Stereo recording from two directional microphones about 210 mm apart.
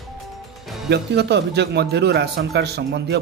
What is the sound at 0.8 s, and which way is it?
Speech, 50° right (ahead or behind).